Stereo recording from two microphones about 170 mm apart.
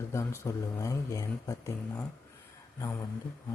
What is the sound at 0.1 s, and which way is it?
Speech, 15° left (ahead or behind).